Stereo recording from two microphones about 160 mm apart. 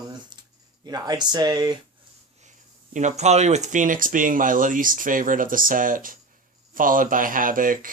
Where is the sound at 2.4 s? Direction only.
50° right (ahead or behind).